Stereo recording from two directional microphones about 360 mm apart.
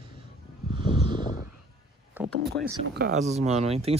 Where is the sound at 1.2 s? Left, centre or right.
Left.